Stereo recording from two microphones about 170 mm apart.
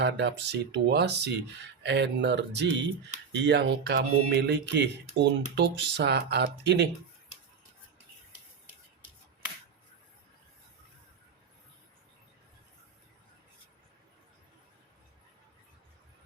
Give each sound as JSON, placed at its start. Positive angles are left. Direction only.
{"t": 0.0, "sound": "speech", "side_deg": -90}
{"t": 1.8, "sound": "speech", "side_deg": -90}